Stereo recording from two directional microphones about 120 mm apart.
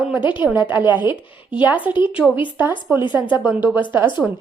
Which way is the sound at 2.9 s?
15° right (ahead or behind).